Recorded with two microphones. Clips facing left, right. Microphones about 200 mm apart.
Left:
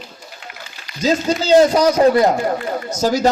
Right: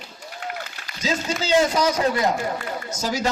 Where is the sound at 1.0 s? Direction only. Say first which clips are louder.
Left 8 dB; 40° left (ahead or behind).